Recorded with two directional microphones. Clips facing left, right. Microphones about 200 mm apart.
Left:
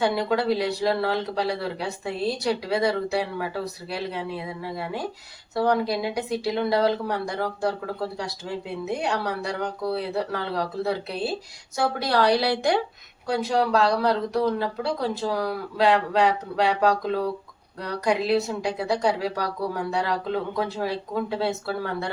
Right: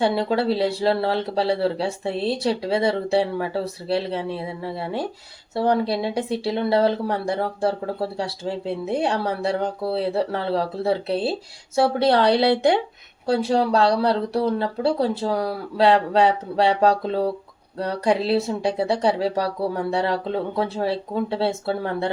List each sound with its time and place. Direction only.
0.0 s speech: 30° right (ahead or behind)